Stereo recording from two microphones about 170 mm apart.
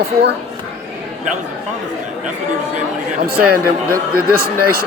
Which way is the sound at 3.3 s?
65° right (ahead or behind).